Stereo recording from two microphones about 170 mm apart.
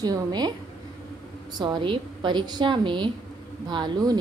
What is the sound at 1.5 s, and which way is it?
A woman's voice, 25° right (ahead or behind).